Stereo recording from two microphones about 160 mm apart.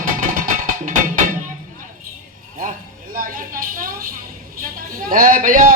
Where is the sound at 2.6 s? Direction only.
55° right (ahead or behind).